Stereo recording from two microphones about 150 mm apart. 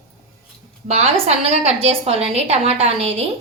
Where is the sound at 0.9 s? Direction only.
45° right (ahead or behind).